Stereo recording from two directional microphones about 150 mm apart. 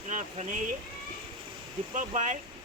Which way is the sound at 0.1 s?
55° right (ahead or behind).